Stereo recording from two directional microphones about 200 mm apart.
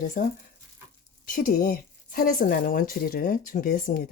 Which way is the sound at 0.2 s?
40° left (ahead or behind).